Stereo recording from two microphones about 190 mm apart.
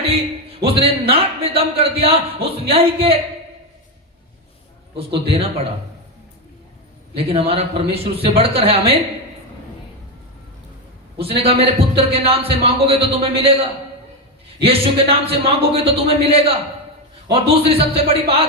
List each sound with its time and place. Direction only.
0.6 s a man's voice: 30° right (ahead or behind)
4.9 s a man's voice: 30° right (ahead or behind)
7.2 s a man's voice: 30° right (ahead or behind)
11.2 s a man's voice: 30° right (ahead or behind)
14.6 s a man's voice: 30° right (ahead or behind)